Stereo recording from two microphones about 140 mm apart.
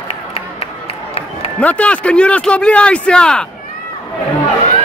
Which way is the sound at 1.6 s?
10° left (ahead or behind).